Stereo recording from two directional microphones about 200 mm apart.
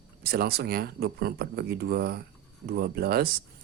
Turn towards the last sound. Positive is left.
turn(degrees=-50)  # may be behind; listen again after turning